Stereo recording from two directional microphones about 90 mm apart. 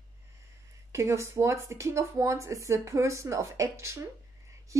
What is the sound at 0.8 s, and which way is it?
Speech, 35° right (ahead or behind).